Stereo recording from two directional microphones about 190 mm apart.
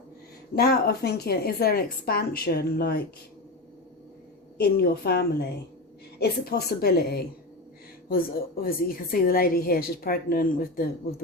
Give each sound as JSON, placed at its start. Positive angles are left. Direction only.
{"t": 0.5, "sound": "a woman's voice", "side_deg": 55}
{"t": 4.5, "sound": "a woman's voice", "side_deg": 55}